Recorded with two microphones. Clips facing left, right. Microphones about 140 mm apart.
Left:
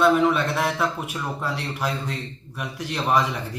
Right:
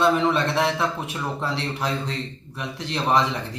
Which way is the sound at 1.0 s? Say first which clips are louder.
Right 1 dB; 5° left (ahead or behind).